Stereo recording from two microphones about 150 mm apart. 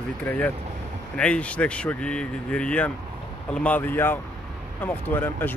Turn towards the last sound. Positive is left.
turn(degrees=15)  # may be behind; listen again after turning